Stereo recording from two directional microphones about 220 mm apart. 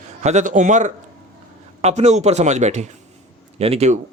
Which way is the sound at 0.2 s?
30° right (ahead or behind).